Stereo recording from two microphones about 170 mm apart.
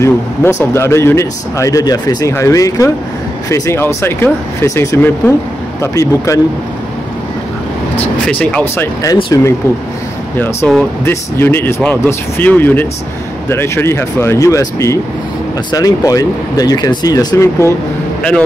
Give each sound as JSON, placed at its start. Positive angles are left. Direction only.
{"t": 0.0, "sound": "speech", "side_deg": 15}
{"t": 8.3, "sound": "speech", "side_deg": 5}
{"t": 9.0, "sound": "speech", "side_deg": 20}